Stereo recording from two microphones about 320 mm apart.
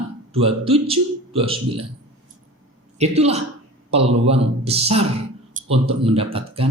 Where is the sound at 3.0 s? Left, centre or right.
Centre.